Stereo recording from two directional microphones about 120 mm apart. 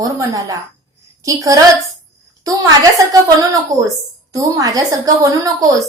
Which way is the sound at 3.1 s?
30° right (ahead or behind).